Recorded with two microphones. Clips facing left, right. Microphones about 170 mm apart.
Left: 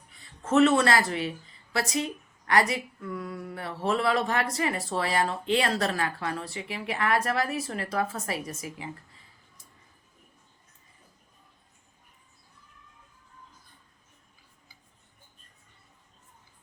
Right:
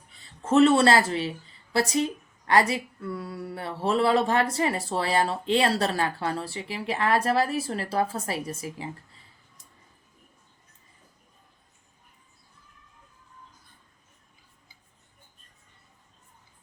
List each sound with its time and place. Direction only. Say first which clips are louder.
0.1 s speech: right 2 dB; 30° right (ahead or behind)